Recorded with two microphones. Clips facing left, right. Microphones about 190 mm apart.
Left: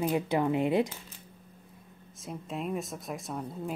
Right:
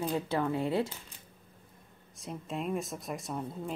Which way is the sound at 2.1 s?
Centre (ahead or behind).